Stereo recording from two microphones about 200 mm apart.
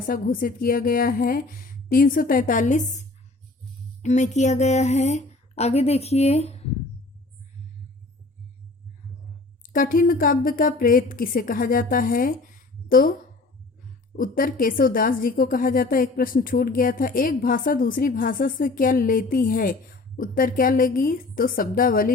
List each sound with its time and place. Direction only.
0.0 s a woman's voice: 45° left (ahead or behind)
9.6 s a woman's voice: 45° left (ahead or behind)